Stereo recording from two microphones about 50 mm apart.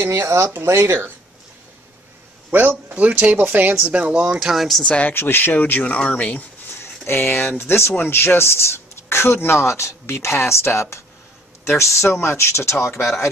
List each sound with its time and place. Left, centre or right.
0.0 s speech: right
2.5 s speech: right
3.7 s speech: right
4.6 s speech: centre
5.1 s speech: left
5.5 s speech: left
6.8 s a man's voice: left
12.1 s a man's voice: left